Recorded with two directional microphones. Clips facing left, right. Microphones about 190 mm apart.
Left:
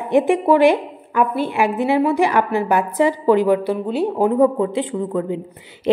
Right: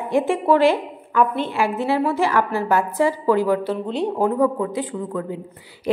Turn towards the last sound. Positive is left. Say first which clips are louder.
# left 5 dB
turn(degrees=20)  # may be behind; listen again after turning